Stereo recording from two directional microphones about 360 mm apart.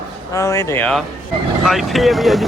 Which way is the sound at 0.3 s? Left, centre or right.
Centre.